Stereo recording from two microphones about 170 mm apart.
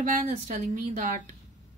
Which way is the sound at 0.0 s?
50° right (ahead or behind).